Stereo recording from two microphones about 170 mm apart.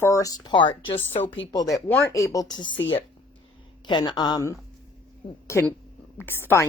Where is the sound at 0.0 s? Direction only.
20° left (ahead or behind).